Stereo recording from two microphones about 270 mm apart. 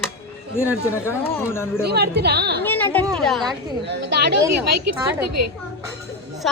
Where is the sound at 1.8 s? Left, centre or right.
Right.